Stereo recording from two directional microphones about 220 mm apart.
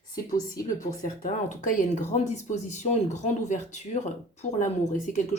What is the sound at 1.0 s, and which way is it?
Speech, 35° left (ahead or behind).